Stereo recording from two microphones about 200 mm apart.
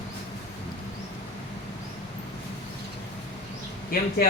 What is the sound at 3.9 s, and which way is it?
Speech, 45° left (ahead or behind).